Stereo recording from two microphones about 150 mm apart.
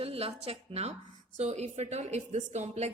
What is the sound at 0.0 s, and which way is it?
A woman's voice, 40° right (ahead or behind).